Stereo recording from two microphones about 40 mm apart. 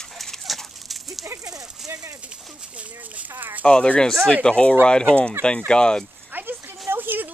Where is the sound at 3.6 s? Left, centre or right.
Centre.